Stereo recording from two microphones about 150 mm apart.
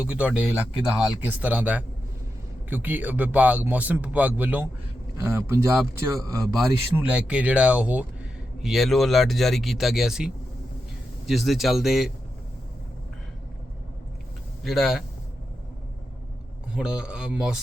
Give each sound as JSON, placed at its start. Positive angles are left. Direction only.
{"t": 0.0, "sound": "a man's voice", "side_deg": -10}
{"t": 6.7, "sound": "speech", "side_deg": -10}
{"t": 14.6, "sound": "speech", "side_deg": 0}
{"t": 16.7, "sound": "speech", "side_deg": -5}